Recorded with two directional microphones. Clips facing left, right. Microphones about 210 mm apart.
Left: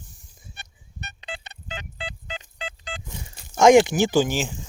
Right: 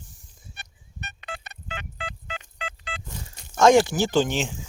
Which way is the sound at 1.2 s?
30° left (ahead or behind).